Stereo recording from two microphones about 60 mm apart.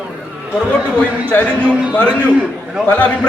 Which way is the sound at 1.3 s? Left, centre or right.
Left.